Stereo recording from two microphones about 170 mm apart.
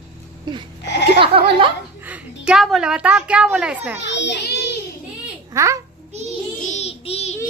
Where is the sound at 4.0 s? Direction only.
90° left.